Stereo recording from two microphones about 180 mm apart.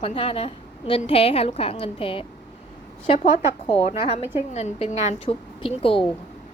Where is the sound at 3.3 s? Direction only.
35° left (ahead or behind).